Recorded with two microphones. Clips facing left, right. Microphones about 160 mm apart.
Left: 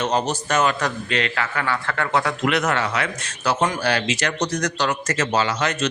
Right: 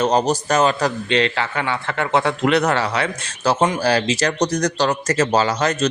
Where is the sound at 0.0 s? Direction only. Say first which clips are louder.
Right 5 dB; 35° right (ahead or behind).